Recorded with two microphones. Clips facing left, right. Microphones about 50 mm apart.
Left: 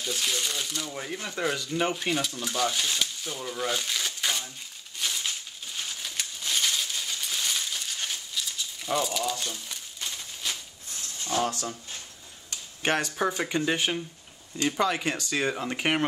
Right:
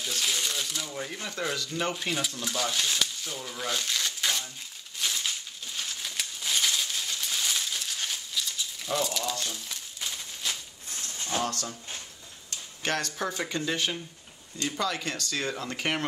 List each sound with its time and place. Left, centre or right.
0.0 s speech: centre
4.9 s crumpling: centre
11.3 s speech: centre
12.8 s speech: centre